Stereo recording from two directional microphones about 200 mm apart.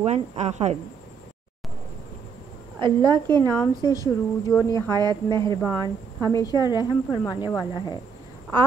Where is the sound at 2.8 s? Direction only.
25° right (ahead or behind).